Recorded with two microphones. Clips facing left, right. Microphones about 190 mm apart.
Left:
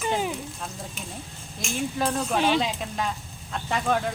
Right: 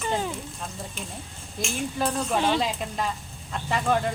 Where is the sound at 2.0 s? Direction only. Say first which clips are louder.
Even; centre (ahead or behind).